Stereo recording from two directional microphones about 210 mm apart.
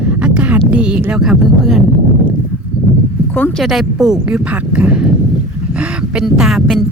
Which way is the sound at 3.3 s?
5° left (ahead or behind).